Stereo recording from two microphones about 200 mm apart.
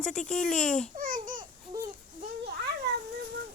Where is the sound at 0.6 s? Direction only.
40° left (ahead or behind).